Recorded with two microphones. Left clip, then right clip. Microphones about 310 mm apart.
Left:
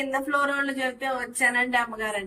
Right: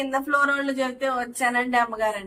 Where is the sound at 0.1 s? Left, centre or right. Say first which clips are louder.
Right 4 dB; centre.